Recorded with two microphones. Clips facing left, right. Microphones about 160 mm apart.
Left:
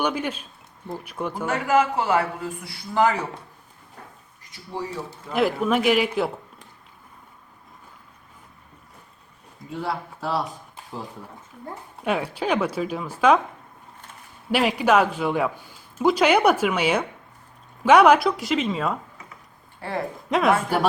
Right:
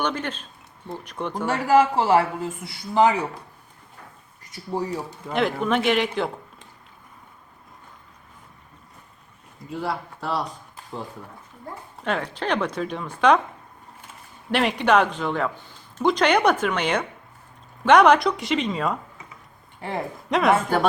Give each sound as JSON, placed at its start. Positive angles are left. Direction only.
{"t": 0.0, "sound": "a man's voice", "side_deg": 10}
{"t": 1.5, "sound": "a man's voice", "side_deg": -35}
{"t": 5.3, "sound": "a woman's voice", "side_deg": 5}
{"t": 9.6, "sound": "a woman's voice", "side_deg": 0}
{"t": 12.0, "sound": "a man's voice", "side_deg": 10}
{"t": 14.5, "sound": "a man's voice", "side_deg": 5}
{"t": 20.3, "sound": "a woman's voice", "side_deg": 0}